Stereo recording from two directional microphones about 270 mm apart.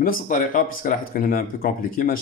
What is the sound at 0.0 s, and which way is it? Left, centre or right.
Speech, left.